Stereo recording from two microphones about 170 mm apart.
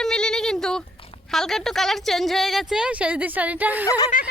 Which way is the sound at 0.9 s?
35° left (ahead or behind).